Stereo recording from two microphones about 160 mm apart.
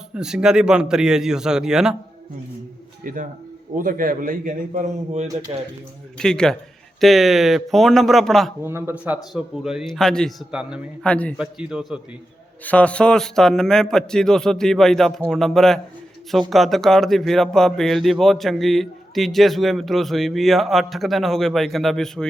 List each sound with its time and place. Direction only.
0.1 s speech: 5° right (ahead or behind)
3.0 s a man's voice: 60° right (ahead or behind)
5.5 s a man's voice: 30° right (ahead or behind)
6.1 s speech: 5° left (ahead or behind)
8.6 s a man's voice: 15° right (ahead or behind)
9.3 s a man's voice: 5° right (ahead or behind)
11.0 s a man's voice: 10° left (ahead or behind)
11.3 s speech: 5° right (ahead or behind)
12.6 s speech: 10° left (ahead or behind)